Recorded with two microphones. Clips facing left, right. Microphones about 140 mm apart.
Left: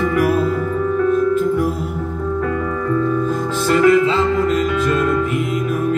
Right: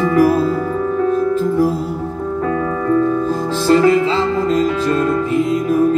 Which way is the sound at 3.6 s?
30° right (ahead or behind).